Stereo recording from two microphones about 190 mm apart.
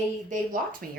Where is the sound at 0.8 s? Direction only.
45° right (ahead or behind).